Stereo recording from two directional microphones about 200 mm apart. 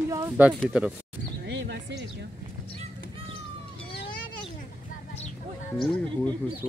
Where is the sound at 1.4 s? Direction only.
60° right (ahead or behind).